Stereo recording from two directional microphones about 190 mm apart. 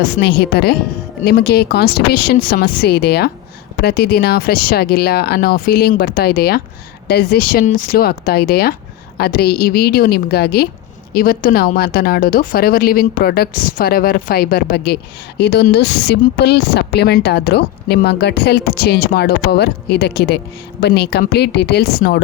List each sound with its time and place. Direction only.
0.0 s a woman's voice: 60° left (ahead or behind)